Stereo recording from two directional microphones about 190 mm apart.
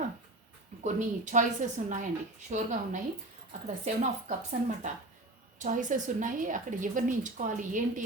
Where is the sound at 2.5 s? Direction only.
40° right (ahead or behind).